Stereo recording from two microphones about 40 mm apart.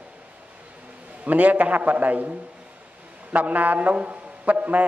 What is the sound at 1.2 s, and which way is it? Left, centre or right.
A man's voice, right.